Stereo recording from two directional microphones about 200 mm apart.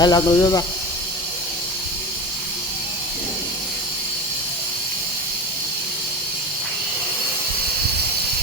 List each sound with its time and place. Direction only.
0.0 s speech: 20° left (ahead or behind)